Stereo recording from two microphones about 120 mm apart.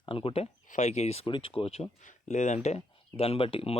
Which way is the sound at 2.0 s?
90° left.